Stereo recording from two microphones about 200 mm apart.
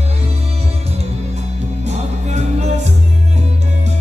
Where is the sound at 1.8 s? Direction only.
35° right (ahead or behind).